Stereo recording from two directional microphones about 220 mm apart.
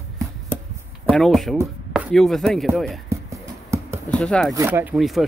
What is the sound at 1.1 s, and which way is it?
Speech, centre (ahead or behind).